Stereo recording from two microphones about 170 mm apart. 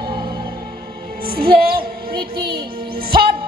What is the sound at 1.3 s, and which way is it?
Music, 60° right (ahead or behind).